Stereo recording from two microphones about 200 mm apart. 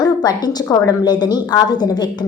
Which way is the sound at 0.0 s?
20° left (ahead or behind).